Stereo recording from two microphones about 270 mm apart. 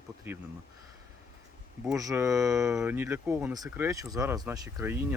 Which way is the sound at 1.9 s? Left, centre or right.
Centre.